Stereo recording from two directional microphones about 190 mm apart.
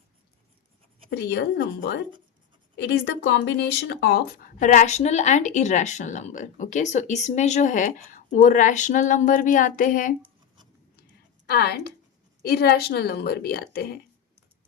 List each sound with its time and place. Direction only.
1.1 s a woman's voice: 60° left (ahead or behind); by 10.2 s 45° left (ahead or behind)
11.5 s a woman's voice: 55° left (ahead or behind)